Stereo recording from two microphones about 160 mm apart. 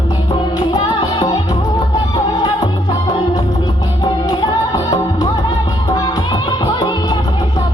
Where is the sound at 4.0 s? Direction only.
25° left (ahead or behind).